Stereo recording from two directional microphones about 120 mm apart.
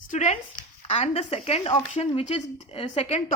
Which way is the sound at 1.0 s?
55° left (ahead or behind).